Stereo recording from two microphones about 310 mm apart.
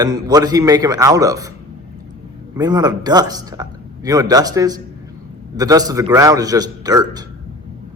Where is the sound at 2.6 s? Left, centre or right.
Centre.